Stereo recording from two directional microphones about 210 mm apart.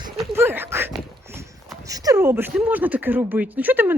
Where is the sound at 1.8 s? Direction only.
15° right (ahead or behind).